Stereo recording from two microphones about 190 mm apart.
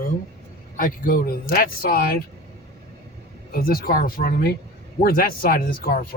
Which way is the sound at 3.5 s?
50° left (ahead or behind).